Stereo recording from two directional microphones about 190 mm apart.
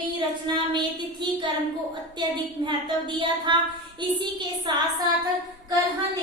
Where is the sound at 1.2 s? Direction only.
25° right (ahead or behind).